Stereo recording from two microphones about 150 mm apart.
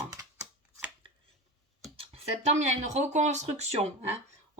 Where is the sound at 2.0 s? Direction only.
45° right (ahead or behind).